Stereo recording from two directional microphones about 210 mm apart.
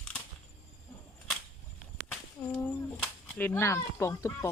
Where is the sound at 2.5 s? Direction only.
10° left (ahead or behind).